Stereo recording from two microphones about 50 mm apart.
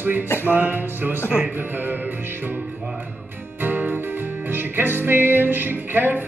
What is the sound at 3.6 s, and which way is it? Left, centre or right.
Music, right.